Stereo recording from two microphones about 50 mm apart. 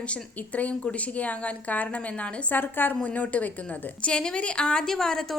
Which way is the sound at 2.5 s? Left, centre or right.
Left.